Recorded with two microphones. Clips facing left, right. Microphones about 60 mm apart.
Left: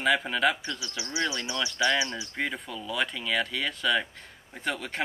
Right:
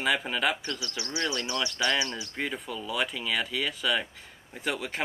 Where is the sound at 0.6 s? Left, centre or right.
Centre.